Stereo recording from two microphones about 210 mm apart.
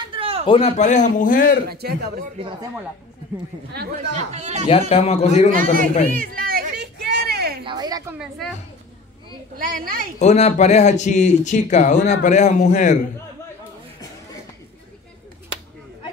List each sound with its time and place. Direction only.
0.1 s a sound: 25° right (ahead or behind)
0.5 s speech: 30° left (ahead or behind)
1.7 s a man's voice: 50° right (ahead or behind)
2.3 s speech: 25° right (ahead or behind)
3.7 s a man's voice: 45° right (ahead or behind)
4.2 s speech: 30° right (ahead or behind)
4.6 s a man's voice: 30° left (ahead or behind)
5.5 s speech: 40° right (ahead or behind)
6.0 s a sound: 45° right (ahead or behind)
7.6 s a sound: 20° right (ahead or behind)
8.4 s a woman's voice: centre (ahead or behind)
9.7 s speech: 40° right (ahead or behind)
10.1 s speech: 30° left (ahead or behind)